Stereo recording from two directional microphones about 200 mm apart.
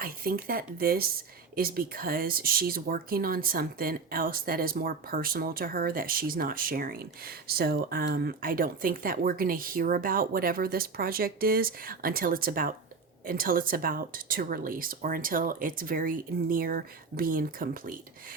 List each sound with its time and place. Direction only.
0.0 s speech: 45° right (ahead or behind)